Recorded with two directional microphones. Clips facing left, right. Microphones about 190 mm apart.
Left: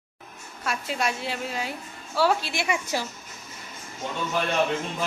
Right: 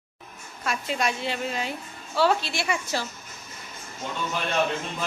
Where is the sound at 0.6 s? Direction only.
5° left (ahead or behind).